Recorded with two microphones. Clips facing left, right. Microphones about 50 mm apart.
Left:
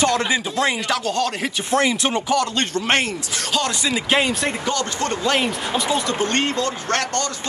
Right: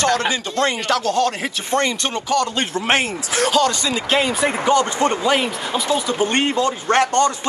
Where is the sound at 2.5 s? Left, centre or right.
Centre.